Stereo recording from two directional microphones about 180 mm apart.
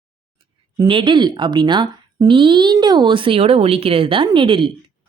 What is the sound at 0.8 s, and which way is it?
Speech, 25° right (ahead or behind).